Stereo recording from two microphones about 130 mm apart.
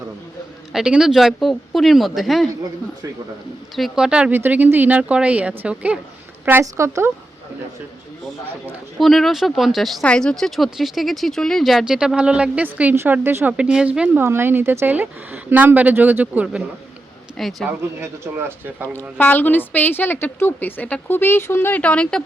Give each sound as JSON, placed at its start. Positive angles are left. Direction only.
{"t": 0.7, "sound": "speech", "side_deg": -5}
{"t": 3.8, "sound": "a woman's voice", "side_deg": -5}
{"t": 9.0, "sound": "a woman's voice", "side_deg": 0}
{"t": 17.3, "sound": "speech", "side_deg": 0}
{"t": 17.7, "sound": "a woman's voice", "side_deg": -15}
{"t": 18.9, "sound": "a woman's voice", "side_deg": 15}